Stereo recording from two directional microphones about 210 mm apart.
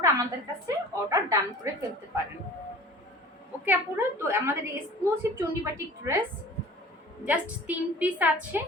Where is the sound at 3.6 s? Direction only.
10° right (ahead or behind).